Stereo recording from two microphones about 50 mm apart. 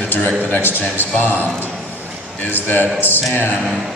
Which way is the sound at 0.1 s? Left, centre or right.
Left.